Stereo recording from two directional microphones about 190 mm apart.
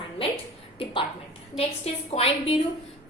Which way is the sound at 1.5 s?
30° left (ahead or behind).